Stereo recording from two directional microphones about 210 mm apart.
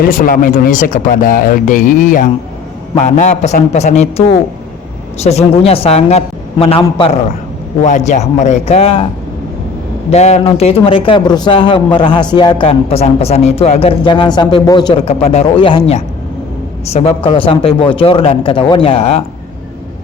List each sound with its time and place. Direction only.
0.0 s speech: 40° left (ahead or behind)
5.2 s a man's voice: 30° left (ahead or behind)
10.1 s a man's voice: 30° left (ahead or behind)